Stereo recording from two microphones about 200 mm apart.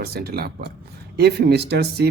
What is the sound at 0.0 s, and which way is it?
Speech, 50° right (ahead or behind).